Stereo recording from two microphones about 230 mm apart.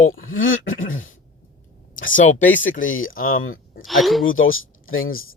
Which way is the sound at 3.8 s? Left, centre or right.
Centre.